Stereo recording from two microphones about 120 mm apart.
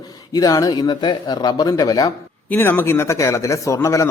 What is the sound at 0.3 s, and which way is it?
Speech, 30° left (ahead or behind).